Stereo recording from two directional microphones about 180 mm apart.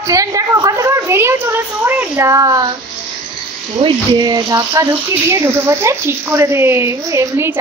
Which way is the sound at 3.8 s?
25° right (ahead or behind).